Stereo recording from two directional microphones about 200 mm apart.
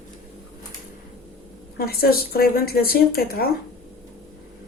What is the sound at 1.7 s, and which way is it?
Speech, 50° left (ahead or behind).